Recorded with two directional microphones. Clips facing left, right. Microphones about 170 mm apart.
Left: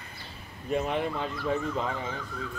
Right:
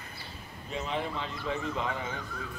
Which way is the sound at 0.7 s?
55° left (ahead or behind).